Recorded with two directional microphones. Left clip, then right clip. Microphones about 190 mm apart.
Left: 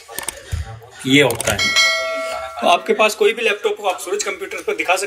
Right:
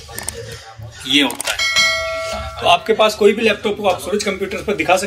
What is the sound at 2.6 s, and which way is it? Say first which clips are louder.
Speech: right 1 dB; 20° right (ahead or behind).